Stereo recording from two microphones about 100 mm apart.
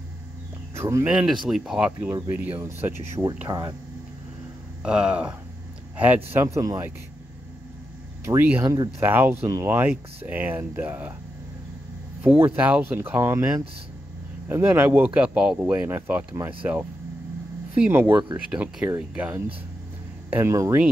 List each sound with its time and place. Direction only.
0.7 s speech: 25° right (ahead or behind)
1.0 s speech: 10° right (ahead or behind)
1.9 s speech: 20° right (ahead or behind)
3.4 s speech: 40° right (ahead or behind)
4.8 s speech: 10° right (ahead or behind); by 6.8 s 35° right (ahead or behind)
8.4 s speech: 20° right (ahead or behind)
12.4 s speech: 20° right (ahead or behind)